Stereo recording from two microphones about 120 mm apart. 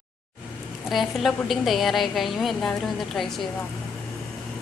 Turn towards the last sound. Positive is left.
turn(degrees=5)  # may be behind; listen again after turning